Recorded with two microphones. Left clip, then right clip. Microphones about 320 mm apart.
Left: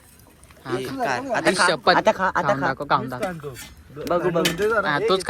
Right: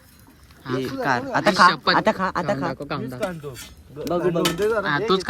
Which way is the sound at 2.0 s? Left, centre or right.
Right.